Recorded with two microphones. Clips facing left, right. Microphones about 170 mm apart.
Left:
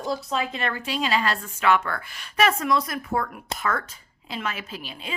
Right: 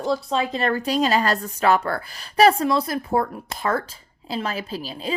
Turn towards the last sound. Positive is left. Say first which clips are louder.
# right 7 dB
turn(degrees=-35)  # may be behind; listen again after turning